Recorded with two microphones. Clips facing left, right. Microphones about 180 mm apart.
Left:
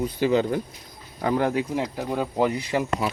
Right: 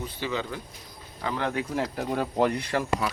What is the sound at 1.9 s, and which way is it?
Speech, centre (ahead or behind).